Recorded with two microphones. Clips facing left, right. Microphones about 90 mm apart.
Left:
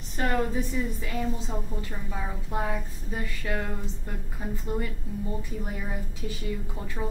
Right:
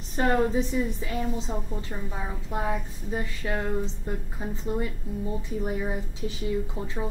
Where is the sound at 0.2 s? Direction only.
25° right (ahead or behind).